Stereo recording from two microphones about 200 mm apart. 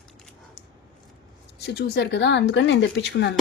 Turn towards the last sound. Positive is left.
turn(degrees=60)  # may be behind; listen again after turning